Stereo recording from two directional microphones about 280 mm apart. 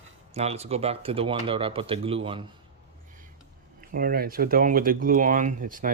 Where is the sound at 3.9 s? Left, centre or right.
Right.